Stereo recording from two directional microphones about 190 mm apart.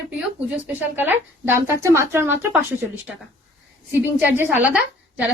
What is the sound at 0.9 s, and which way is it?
A woman's voice, 10° right (ahead or behind).